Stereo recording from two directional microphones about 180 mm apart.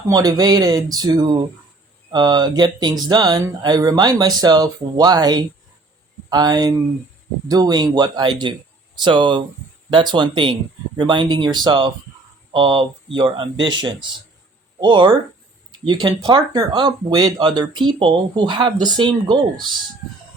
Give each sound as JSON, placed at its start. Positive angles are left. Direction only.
{"t": 0.1, "sound": "speech", "side_deg": -20}